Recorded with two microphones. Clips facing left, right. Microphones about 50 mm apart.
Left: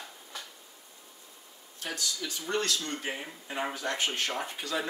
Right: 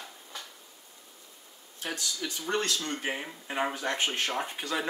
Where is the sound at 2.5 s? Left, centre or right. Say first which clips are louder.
Right 1 dB; right.